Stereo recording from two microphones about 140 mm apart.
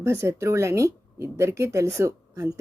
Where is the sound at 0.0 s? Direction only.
20° right (ahead or behind).